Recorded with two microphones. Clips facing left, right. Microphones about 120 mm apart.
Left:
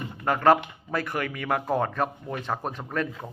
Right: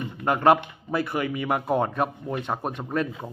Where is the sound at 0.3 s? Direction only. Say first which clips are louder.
Right 1 dB; 20° right (ahead or behind).